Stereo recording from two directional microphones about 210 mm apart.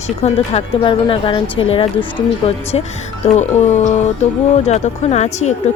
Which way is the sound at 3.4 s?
35° left (ahead or behind).